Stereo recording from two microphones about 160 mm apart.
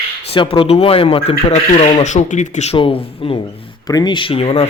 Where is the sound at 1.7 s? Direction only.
50° left (ahead or behind).